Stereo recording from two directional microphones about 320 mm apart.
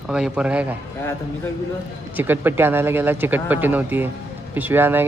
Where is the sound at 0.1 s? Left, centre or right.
Centre.